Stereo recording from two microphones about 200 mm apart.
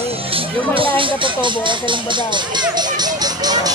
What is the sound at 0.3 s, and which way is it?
Speech, 25° right (ahead or behind).